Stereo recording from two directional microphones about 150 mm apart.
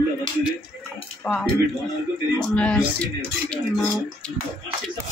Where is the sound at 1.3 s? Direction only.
10° left (ahead or behind).